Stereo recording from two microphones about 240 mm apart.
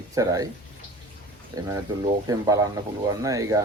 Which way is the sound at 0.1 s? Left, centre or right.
Centre.